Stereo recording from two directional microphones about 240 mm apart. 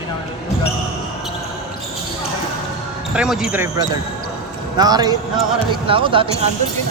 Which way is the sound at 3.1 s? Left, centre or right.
Centre.